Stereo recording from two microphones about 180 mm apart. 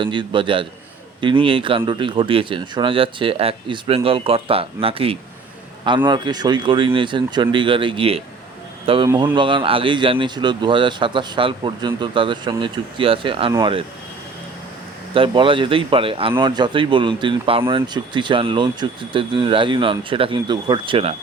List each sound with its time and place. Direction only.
0.0 s speech: 25° right (ahead or behind)
15.1 s speech: 30° right (ahead or behind)